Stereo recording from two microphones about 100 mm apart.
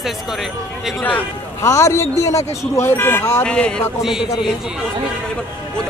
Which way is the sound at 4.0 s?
5° right (ahead or behind).